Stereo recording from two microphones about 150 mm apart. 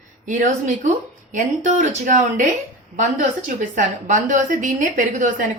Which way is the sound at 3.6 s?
55° right (ahead or behind).